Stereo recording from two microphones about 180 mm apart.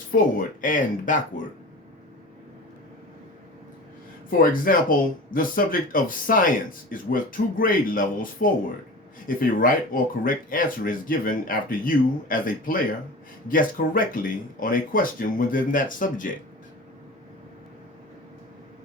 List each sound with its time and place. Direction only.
0.1 s speech: 50° left (ahead or behind)
4.3 s speech: 50° left (ahead or behind)